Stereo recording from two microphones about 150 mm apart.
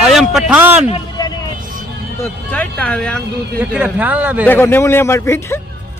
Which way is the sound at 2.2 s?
10° left (ahead or behind).